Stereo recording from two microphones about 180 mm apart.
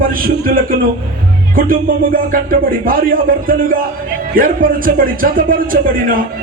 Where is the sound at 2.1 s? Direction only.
50° right (ahead or behind).